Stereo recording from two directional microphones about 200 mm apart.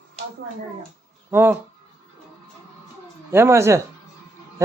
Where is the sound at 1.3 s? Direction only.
10° right (ahead or behind).